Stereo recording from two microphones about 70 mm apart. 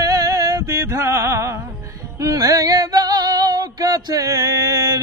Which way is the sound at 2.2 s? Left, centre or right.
Right.